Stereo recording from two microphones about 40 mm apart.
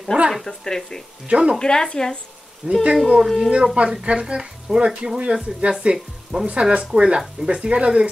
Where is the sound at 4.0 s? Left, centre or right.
Right.